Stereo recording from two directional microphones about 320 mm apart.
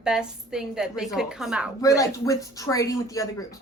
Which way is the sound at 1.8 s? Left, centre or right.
Centre.